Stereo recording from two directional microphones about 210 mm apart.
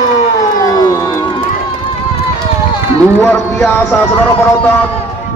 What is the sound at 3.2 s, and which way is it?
Speech, 10° left (ahead or behind).